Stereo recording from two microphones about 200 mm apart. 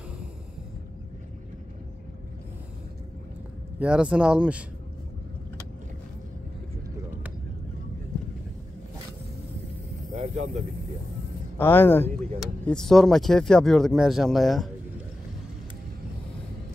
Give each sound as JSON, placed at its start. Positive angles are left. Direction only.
{"t": 3.8, "sound": "speech", "side_deg": -5}
{"t": 10.1, "sound": "a sound", "side_deg": -35}
{"t": 11.5, "sound": "speech", "side_deg": 10}